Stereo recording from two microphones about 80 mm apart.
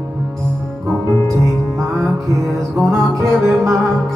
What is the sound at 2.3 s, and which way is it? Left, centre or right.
Music, right.